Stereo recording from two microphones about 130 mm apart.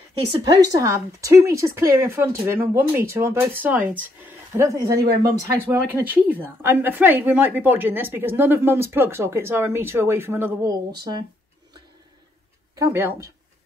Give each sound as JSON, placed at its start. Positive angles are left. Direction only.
{"t": 0.5, "sound": "a woman's voice", "side_deg": -25}
{"t": 10.9, "sound": "speech", "side_deg": -35}
{"t": 12.7, "sound": "speech", "side_deg": -20}